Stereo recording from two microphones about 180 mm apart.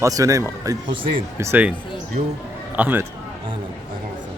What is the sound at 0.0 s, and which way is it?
A man's voice, 20° right (ahead or behind).